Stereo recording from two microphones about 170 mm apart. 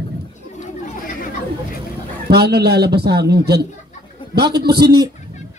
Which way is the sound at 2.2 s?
70° right (ahead or behind).